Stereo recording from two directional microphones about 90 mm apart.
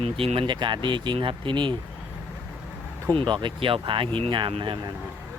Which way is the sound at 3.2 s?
60° right (ahead or behind).